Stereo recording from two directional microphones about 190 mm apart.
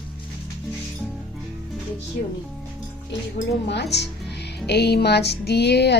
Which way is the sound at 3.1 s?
65° left (ahead or behind).